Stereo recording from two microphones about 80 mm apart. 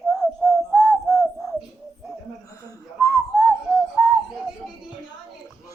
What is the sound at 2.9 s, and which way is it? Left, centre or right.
Whistling, left.